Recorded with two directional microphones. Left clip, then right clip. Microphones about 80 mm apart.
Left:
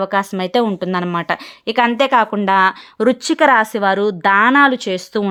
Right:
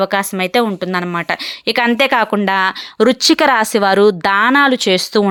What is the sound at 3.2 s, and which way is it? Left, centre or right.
Speech, right.